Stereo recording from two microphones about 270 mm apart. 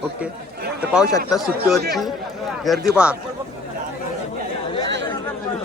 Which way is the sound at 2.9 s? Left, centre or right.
Centre.